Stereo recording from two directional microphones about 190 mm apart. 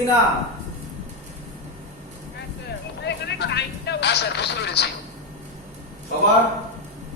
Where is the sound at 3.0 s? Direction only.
60° left (ahead or behind).